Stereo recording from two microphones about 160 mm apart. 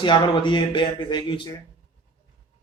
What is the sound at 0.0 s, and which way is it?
Speech, 30° left (ahead or behind).